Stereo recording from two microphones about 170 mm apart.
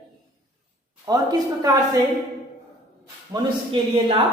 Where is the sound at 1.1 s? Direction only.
20° right (ahead or behind).